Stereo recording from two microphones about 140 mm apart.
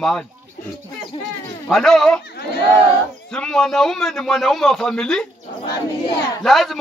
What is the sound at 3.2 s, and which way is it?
A man's voice, 5° left (ahead or behind).